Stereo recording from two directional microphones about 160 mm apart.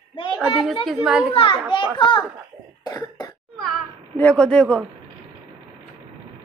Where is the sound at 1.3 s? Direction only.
35° left (ahead or behind).